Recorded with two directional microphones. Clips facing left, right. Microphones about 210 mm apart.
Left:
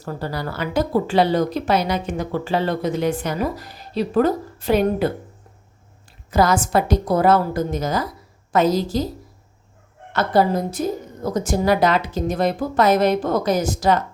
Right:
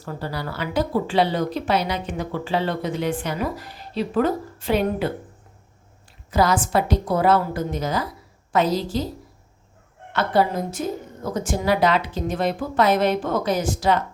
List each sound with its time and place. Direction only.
0.0 s a woman's voice: 45° left (ahead or behind)
6.3 s a woman's voice: 45° left (ahead or behind)
10.1 s a woman's voice: 40° left (ahead or behind)